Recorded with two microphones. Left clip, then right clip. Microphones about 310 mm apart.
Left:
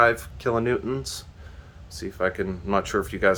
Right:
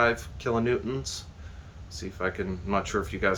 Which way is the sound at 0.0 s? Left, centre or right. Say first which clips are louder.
Left 5 dB; centre.